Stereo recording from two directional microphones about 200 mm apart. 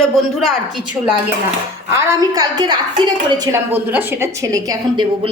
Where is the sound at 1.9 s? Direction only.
15° right (ahead or behind).